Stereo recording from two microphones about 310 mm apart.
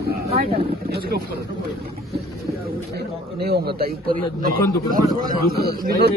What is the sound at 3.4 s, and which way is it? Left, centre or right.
Speech, right.